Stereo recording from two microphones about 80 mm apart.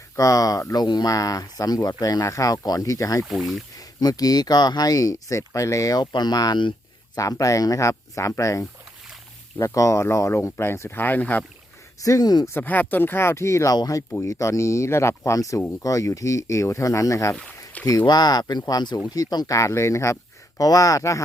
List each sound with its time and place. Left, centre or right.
0.2 s speech: left
0.7 s speech: left
3.2 s speech: centre
3.8 s speech: left
6.0 s speech: left
7.2 s speech: left
12.0 s speech: left
12.5 s speech: left
18.0 s speech: left
19.5 s speech: left